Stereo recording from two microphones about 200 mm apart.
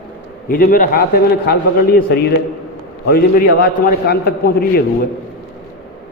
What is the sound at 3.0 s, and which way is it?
A man's voice, 45° left (ahead or behind).